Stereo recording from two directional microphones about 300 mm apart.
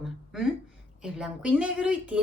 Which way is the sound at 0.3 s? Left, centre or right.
Centre.